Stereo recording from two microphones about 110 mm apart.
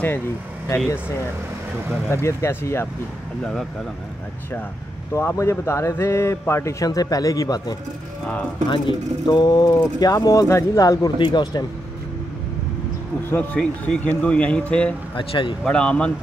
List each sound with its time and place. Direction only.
2.0 s speech: 25° left (ahead or behind)
5.1 s speech: 25° left (ahead or behind)
8.6 s speech: 50° left (ahead or behind); by 11.1 s 30° left (ahead or behind)
11.1 s speech: 45° left (ahead or behind)
13.3 s speech: 15° left (ahead or behind)
15.1 s speech: 50° left (ahead or behind)
15.6 s speech: 10° left (ahead or behind)